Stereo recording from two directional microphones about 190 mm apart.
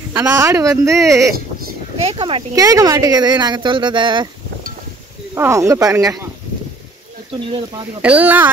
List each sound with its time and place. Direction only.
0.1 s speech: 15° right (ahead or behind)
2.0 s speech: 30° right (ahead or behind)
5.3 s speech: 15° right (ahead or behind)
8.0 s speech: 10° right (ahead or behind)